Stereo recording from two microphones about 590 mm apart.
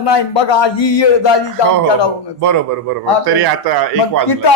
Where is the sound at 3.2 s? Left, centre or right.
Right.